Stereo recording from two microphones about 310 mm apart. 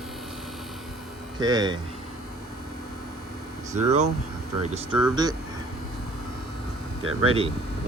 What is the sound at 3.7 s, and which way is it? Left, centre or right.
Speech, right.